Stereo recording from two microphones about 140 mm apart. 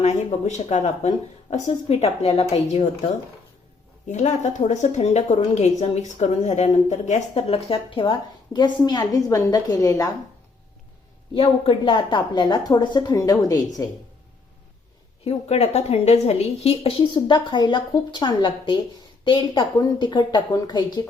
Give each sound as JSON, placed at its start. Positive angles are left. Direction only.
{"t": 0.0, "sound": "speech", "side_deg": 55}
{"t": 4.1, "sound": "a woman's voice", "side_deg": 55}
{"t": 7.1, "sound": "a woman's voice", "side_deg": 45}
{"t": 11.3, "sound": "a woman's voice", "side_deg": 40}
{"t": 15.2, "sound": "speech", "side_deg": 45}